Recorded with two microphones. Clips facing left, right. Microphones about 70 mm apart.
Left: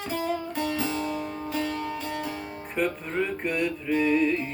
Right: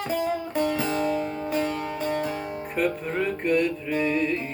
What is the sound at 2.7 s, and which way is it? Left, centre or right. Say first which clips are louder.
Music: right 1 dB; centre.